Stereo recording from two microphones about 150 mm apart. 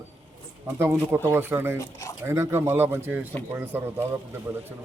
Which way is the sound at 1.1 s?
15° right (ahead or behind).